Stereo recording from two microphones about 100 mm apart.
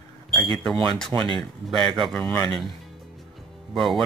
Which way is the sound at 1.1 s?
45° right (ahead or behind).